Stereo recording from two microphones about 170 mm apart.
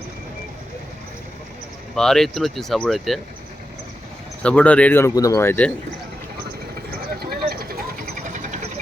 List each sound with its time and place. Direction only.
2.0 s speech: centre (ahead or behind)
4.4 s speech: 10° left (ahead or behind)
7.3 s vehicle: 65° right (ahead or behind); by 8.5 s 45° right (ahead or behind)